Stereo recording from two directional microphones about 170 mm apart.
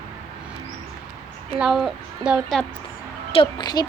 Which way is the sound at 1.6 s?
Centre (ahead or behind).